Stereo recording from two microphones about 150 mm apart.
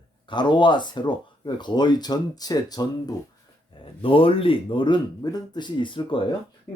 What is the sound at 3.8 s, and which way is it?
Speech, 35° left (ahead or behind).